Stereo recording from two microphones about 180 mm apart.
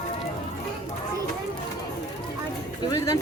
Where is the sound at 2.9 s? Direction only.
20° left (ahead or behind).